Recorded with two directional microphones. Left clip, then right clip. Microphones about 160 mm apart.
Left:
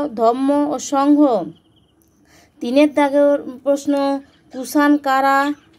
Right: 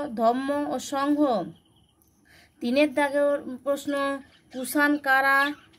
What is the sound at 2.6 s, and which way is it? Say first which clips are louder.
Speech: left 8 dB; 20° left (ahead or behind).